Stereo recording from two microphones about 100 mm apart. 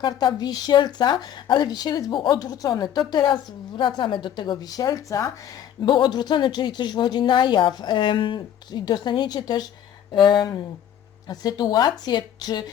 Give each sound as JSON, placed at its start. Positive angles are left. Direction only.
{"t": 0.0, "sound": "a woman's voice", "side_deg": 45}
{"t": 2.4, "sound": "speech", "side_deg": 40}
{"t": 5.8, "sound": "a woman's voice", "side_deg": 50}
{"t": 11.3, "sound": "a woman's voice", "side_deg": 40}